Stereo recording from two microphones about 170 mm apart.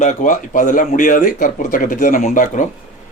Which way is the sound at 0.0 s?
50° left (ahead or behind).